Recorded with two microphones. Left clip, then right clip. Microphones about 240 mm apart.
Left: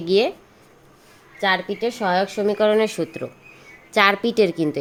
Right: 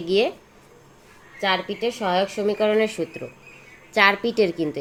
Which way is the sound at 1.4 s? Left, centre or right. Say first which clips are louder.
Left 2 dB; left.